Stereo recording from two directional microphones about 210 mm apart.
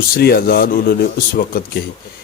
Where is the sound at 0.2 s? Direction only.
45° left (ahead or behind).